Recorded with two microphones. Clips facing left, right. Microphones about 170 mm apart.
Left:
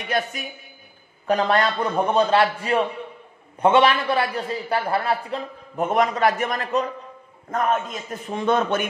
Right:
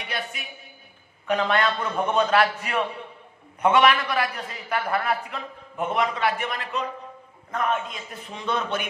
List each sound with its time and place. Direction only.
0.0 s a man's voice: 45° left (ahead or behind)